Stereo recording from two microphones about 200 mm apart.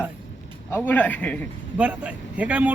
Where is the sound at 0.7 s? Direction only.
10° left (ahead or behind).